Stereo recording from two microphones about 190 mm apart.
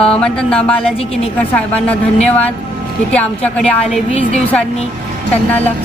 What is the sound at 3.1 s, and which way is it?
Speech, 5° left (ahead or behind).